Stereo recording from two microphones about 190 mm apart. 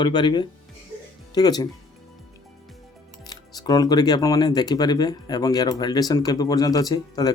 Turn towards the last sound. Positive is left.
turn(degrees=20)  # may be behind; listen again after turning